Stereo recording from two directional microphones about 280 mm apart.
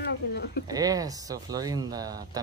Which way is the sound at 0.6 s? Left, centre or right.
Centre.